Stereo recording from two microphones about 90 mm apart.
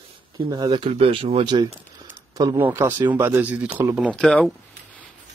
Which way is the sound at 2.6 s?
25° right (ahead or behind).